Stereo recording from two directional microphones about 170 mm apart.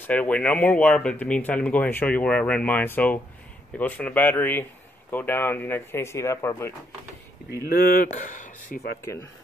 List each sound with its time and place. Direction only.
0.0 s speech: 10° left (ahead or behind)
7.6 s speech: 60° left (ahead or behind)